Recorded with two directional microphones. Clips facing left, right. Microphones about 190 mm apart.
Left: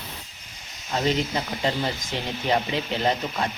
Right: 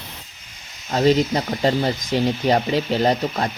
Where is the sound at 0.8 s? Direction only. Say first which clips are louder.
Right 7 dB; 40° right (ahead or behind).